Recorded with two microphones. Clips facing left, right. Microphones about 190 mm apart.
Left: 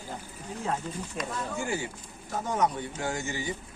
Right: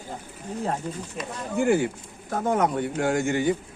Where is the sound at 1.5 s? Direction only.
60° right (ahead or behind).